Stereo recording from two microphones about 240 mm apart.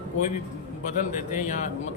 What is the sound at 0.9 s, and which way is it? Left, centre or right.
Speech, left.